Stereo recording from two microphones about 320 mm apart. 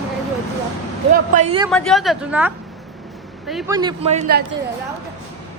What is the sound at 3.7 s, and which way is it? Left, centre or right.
Speech, centre.